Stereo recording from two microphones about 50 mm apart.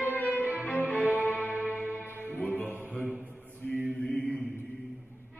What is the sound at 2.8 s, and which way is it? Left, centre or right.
Mantra, right.